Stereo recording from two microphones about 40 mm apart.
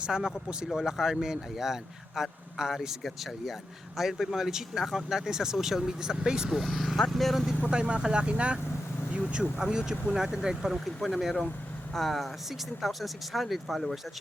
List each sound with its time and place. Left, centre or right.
0.0 s speech: centre
3.9 s speech: centre
6.5 s speech: centre
7.7 s speech: right
10.8 s speech: centre